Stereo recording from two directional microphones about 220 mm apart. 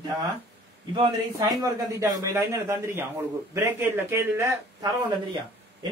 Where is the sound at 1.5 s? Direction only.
15° right (ahead or behind).